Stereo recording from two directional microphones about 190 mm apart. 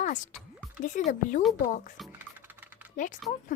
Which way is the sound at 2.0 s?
10° right (ahead or behind).